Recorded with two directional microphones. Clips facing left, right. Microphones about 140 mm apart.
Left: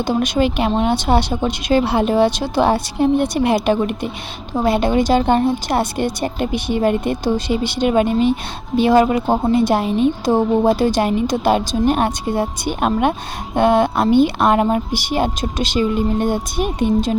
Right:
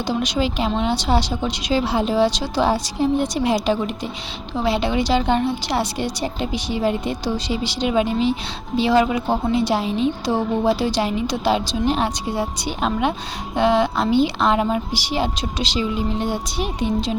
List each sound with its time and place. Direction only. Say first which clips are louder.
0.0 s a woman's voice: left 4 dB; 50° left (ahead or behind)